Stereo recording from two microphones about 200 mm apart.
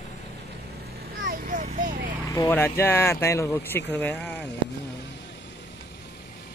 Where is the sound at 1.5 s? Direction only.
40° right (ahead or behind).